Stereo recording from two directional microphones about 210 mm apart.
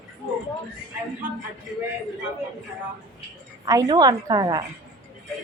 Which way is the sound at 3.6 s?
15° right (ahead or behind).